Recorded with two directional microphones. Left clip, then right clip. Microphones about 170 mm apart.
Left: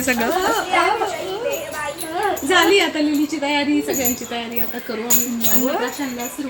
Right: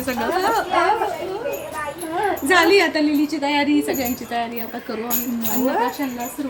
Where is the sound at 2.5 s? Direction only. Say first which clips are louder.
Even; 15° right (ahead or behind).